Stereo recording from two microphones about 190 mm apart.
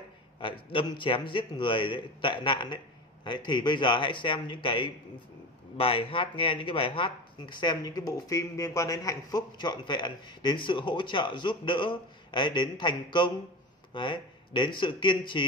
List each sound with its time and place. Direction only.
0.4 s speech: 25° left (ahead or behind)